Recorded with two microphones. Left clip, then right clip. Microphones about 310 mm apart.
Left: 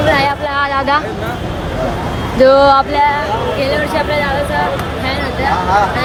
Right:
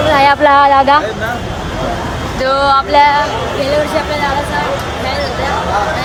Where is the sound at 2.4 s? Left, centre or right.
Centre.